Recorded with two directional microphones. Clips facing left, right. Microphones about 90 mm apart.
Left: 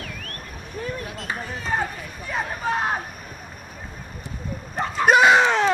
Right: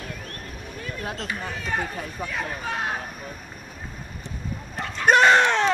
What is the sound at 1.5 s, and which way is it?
Speech, 35° left (ahead or behind).